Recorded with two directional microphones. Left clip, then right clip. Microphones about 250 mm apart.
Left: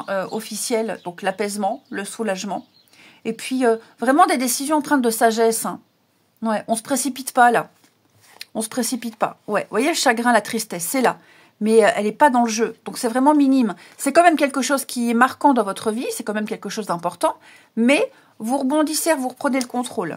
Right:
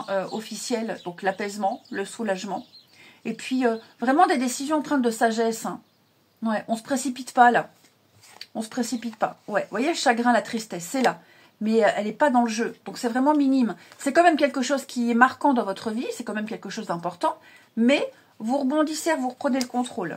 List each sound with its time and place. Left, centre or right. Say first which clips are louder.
0.0 s a woman's voice: left 3 dB; left